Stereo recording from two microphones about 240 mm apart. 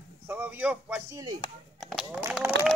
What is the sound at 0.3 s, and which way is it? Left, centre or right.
A man's voice, centre.